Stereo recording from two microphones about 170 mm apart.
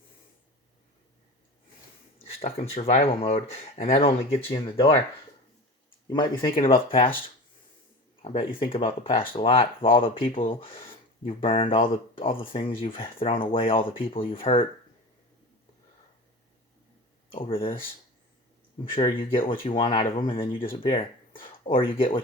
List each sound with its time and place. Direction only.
2.1 s speech: 40° left (ahead or behind)
6.1 s speech: 25° left (ahead or behind)
8.2 s speech: 35° left (ahead or behind)
17.3 s speech: 30° left (ahead or behind)
18.9 s speech: 30° left (ahead or behind)